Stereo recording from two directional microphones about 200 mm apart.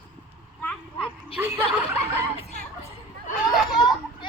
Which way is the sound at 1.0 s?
30° left (ahead or behind).